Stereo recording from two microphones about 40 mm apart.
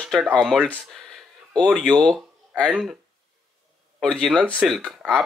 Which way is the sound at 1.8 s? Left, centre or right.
Left.